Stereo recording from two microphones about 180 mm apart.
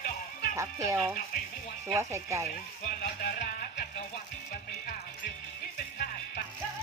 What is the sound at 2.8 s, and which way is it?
Music, 45° left (ahead or behind).